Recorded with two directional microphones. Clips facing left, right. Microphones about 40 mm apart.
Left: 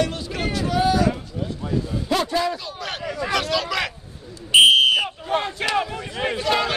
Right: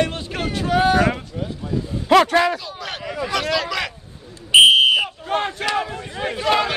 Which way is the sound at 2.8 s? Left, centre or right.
Centre.